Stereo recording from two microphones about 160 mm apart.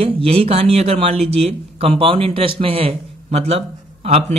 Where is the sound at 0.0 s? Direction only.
35° right (ahead or behind).